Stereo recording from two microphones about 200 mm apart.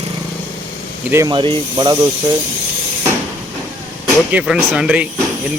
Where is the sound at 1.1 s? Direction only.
15° right (ahead or behind).